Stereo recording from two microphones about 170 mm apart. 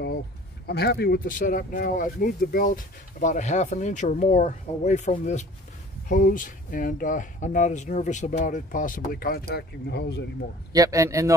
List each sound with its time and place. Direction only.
0.7 s speech: 70° left (ahead or behind)
10.7 s a man's voice: 20° right (ahead or behind)